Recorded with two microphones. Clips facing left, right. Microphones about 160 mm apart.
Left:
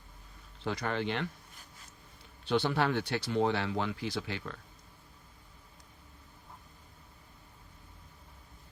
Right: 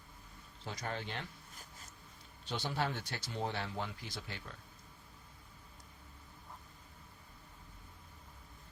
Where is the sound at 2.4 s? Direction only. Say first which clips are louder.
Left 8 dB; 65° left (ahead or behind); by 4.5 s 90° left.